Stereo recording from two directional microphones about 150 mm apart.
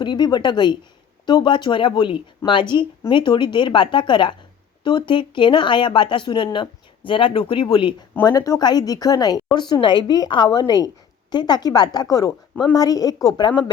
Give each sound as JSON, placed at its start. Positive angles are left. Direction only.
{"t": 0.0, "sound": "a woman's voice", "side_deg": 30}